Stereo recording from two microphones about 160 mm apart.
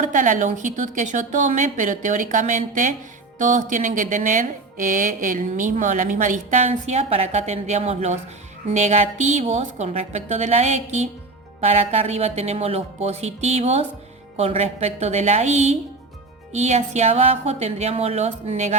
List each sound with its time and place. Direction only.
0.0 s speech: 55° right (ahead or behind)